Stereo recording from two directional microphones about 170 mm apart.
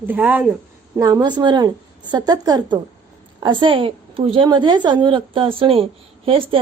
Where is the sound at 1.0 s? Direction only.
20° right (ahead or behind).